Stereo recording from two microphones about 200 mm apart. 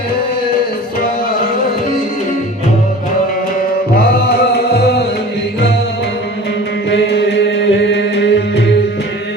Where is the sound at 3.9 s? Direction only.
55° left (ahead or behind).